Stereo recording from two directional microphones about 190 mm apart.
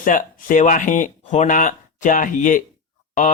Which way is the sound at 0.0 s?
45° left (ahead or behind).